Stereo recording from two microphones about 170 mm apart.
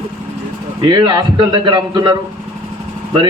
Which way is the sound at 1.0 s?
25° right (ahead or behind).